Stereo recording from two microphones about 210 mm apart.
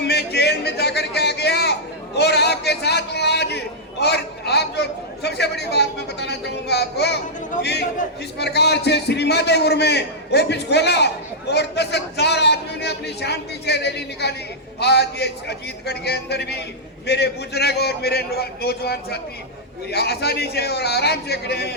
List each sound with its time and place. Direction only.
0.0 s a sound: 50° left (ahead or behind)
4.0 s chatter: 50° left (ahead or behind)
7.6 s a man's voice: 55° left (ahead or behind)